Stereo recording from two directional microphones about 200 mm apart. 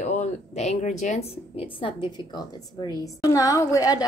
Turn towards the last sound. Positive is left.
turn(degrees=15)  # may be behind; listen again after turning